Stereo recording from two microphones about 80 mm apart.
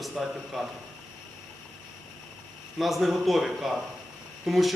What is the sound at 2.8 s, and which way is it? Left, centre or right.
A man's voice, centre.